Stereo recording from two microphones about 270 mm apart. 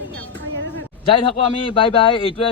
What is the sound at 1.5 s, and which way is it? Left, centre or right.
Speech, centre.